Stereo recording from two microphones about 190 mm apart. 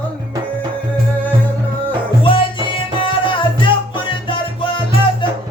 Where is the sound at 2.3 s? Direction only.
25° left (ahead or behind).